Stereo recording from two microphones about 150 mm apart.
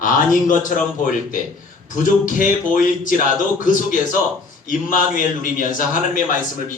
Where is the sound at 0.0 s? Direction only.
60° left (ahead or behind).